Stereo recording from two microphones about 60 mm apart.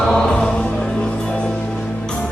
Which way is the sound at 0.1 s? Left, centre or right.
Centre.